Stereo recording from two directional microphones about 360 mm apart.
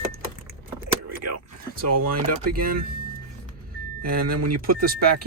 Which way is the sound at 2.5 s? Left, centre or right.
Right.